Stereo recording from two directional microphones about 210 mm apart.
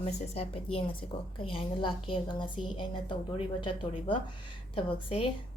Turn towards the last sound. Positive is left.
turn(degrees=25)  # may be behind; listen again after turning